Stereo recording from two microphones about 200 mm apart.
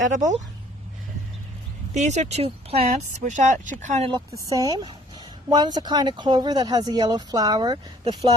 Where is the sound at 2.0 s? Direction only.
35° right (ahead or behind).